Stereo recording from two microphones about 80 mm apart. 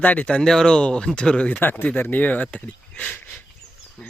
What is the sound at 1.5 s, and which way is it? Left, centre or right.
Speech, left.